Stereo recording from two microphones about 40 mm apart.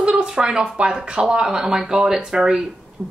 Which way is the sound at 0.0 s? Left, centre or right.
Right.